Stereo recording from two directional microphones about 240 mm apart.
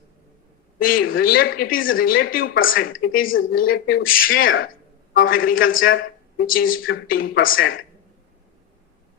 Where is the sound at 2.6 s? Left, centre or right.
Left.